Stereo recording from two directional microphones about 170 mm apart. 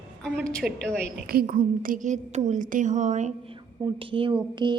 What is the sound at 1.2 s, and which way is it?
Speech, 60° right (ahead or behind).